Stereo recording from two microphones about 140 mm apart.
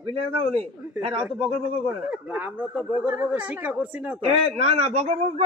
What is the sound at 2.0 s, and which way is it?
Speech, 10° right (ahead or behind).